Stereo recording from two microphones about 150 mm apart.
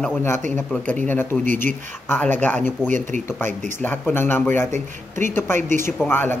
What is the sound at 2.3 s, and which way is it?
Speech, 10° left (ahead or behind).